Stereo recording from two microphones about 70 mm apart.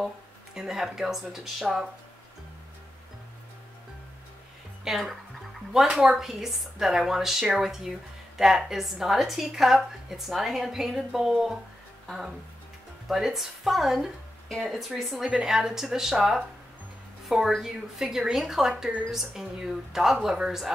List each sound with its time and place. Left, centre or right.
0.6 s a woman's voice: centre
4.8 s a woman's voice: centre
13.1 s a woman's voice: centre